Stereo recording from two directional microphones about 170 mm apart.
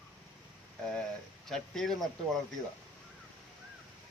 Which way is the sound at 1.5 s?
Centre (ahead or behind).